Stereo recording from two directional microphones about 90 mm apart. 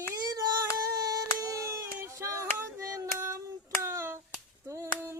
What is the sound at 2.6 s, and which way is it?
Hands, 35° right (ahead or behind).